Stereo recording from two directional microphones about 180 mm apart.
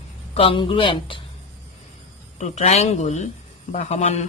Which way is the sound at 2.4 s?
40° left (ahead or behind).